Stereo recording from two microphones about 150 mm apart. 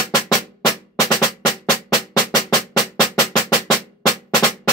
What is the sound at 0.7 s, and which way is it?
Drum, 25° left (ahead or behind).